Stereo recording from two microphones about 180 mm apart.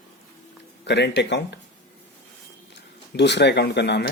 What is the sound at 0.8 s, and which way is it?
Speech, 70° left (ahead or behind).